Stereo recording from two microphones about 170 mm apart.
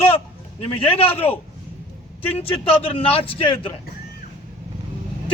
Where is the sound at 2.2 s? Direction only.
35° left (ahead or behind).